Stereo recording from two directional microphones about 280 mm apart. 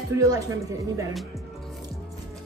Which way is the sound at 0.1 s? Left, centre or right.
Centre.